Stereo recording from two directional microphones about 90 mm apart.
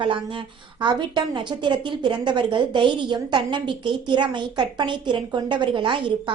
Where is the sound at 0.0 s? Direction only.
70° right (ahead or behind).